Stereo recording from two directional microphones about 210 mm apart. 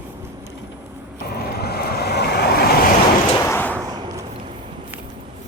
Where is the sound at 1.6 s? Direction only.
50° left (ahead or behind).